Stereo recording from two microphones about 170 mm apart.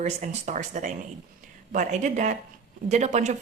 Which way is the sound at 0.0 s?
45° right (ahead or behind).